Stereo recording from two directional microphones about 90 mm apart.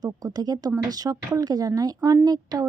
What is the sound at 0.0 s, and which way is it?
A woman's voice, 45° right (ahead or behind).